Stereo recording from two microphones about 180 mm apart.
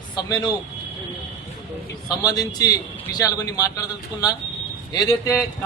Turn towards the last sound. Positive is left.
turn(degrees=20)  # may be behind; listen again after turning